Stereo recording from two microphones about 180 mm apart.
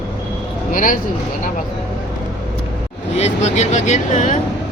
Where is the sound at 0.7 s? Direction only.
50° left (ahead or behind).